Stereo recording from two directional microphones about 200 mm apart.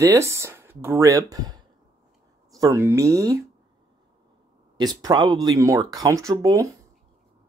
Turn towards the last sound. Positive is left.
turn(degrees=-15)  # may be behind; listen again after turning